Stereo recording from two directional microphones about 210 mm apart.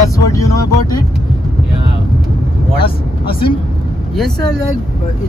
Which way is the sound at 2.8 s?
25° left (ahead or behind).